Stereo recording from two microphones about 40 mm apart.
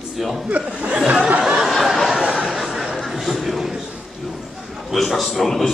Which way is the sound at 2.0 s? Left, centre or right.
Centre.